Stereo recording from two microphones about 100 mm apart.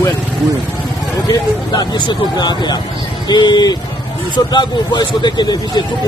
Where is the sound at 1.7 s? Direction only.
45° left (ahead or behind).